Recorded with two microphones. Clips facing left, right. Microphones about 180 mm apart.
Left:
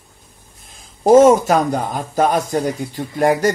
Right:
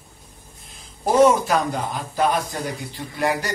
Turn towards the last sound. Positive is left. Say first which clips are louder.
# left 8 dB
turn(degrees=45)  # may be behind; listen again after turning